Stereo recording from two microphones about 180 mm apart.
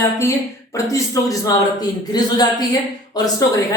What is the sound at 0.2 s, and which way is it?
A woman's voice, 15° left (ahead or behind).